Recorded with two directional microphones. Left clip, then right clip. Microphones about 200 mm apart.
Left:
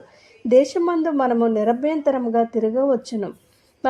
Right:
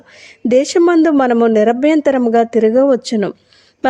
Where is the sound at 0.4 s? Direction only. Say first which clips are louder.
Right 5 dB; 35° right (ahead or behind).